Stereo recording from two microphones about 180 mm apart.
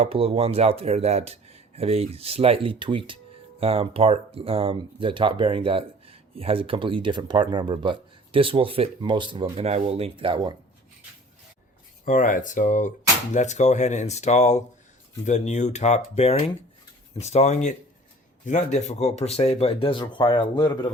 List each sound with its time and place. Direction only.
0.0 s speech: 30° right (ahead or behind)
12.0 s speech: 50° left (ahead or behind); by 20.7 s 25° left (ahead or behind)